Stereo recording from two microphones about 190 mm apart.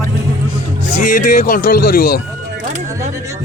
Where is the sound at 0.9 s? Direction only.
40° left (ahead or behind).